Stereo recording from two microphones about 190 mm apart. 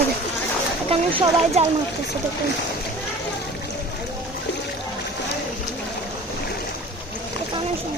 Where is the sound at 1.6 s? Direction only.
35° right (ahead or behind).